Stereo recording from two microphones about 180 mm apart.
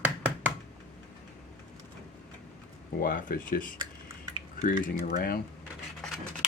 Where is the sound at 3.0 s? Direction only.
55° left (ahead or behind).